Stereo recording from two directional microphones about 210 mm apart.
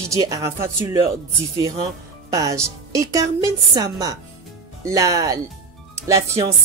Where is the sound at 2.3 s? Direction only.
15° right (ahead or behind).